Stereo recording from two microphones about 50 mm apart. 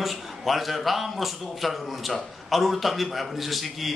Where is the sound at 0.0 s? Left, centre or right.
Centre.